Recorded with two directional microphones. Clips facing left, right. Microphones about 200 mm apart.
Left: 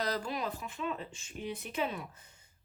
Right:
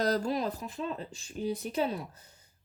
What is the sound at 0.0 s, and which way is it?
Speech, 40° right (ahead or behind).